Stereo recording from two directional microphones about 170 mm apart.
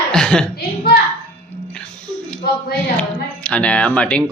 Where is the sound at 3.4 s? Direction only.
5° left (ahead or behind).